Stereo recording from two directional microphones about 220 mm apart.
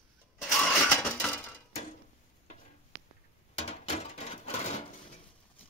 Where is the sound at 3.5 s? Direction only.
25° left (ahead or behind).